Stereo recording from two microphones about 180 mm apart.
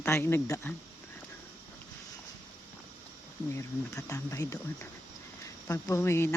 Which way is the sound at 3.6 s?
15° left (ahead or behind).